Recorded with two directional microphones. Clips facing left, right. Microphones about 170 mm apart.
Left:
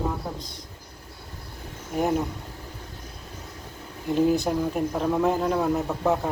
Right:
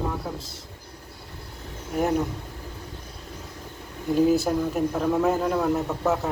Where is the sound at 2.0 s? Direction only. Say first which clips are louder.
Right 1 dB; centre (ahead or behind).